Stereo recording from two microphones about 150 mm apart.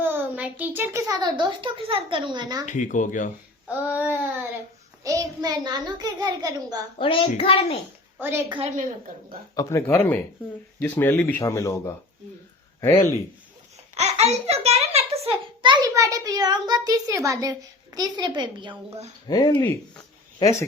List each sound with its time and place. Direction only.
0.0 s a child's voice: 10° right (ahead or behind); by 2.6 s 30° right (ahead or behind)
2.6 s speech: 55° left (ahead or behind)
3.7 s child singing: 10° right (ahead or behind)
5.0 s a child's voice: 25° right (ahead or behind)
7.0 s a child's voice: 35° left (ahead or behind)
8.4 s a woman's voice: 35° right (ahead or behind)
9.6 s speech: 20° left (ahead or behind)
13.9 s a child's voice: 45° right (ahead or behind); by 18.8 s 30° right (ahead or behind)
19.3 s speech: 25° left (ahead or behind)